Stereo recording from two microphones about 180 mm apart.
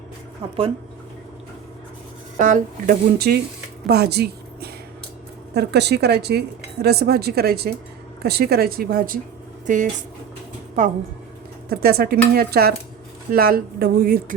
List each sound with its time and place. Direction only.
2.4 s speech: 45° right (ahead or behind)
2.9 s speech: 65° right (ahead or behind); by 10.9 s 40° right (ahead or behind)
11.7 s speech: 60° right (ahead or behind)